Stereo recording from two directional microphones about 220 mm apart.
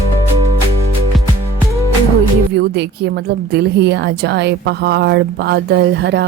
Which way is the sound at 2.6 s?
50° right (ahead or behind).